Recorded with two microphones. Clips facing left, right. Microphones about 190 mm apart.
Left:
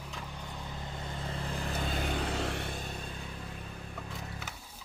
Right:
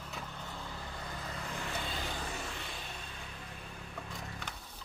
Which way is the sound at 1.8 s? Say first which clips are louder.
Left 6 dB; 55° left (ahead or behind).